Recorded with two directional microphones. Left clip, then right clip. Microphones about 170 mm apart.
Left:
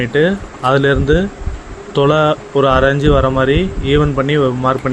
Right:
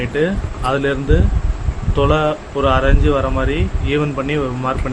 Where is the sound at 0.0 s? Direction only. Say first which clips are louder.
Left 5 dB; 35° left (ahead or behind).